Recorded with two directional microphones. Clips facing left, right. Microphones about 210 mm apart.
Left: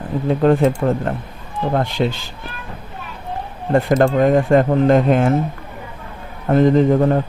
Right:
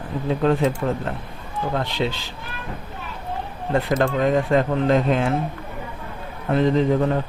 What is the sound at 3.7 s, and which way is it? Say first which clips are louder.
A man's voice: left 6 dB; 50° left (ahead or behind).